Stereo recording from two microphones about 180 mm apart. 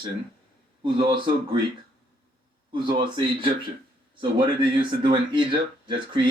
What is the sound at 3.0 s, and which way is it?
Speech, 25° right (ahead or behind).